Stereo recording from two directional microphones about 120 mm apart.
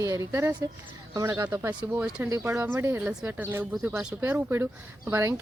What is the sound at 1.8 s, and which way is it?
Speech, 10° right (ahead or behind).